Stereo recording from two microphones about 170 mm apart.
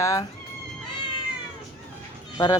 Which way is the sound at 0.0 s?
20° left (ahead or behind).